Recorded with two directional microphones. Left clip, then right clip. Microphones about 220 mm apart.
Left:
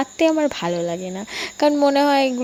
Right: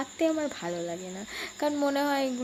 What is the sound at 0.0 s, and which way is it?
Speech, 35° left (ahead or behind).